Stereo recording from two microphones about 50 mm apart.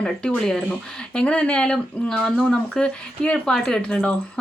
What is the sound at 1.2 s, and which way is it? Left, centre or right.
Speech, left.